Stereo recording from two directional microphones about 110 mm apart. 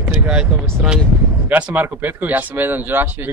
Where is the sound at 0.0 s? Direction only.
10° right (ahead or behind).